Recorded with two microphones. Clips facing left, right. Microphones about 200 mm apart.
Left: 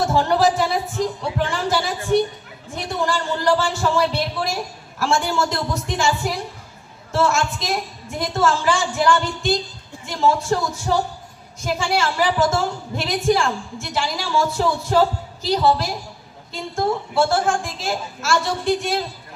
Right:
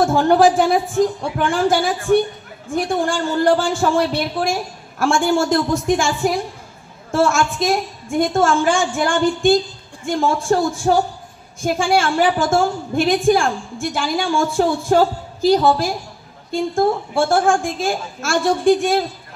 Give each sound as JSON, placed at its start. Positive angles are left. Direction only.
{"t": 0.0, "sound": "a man's voice", "side_deg": -50}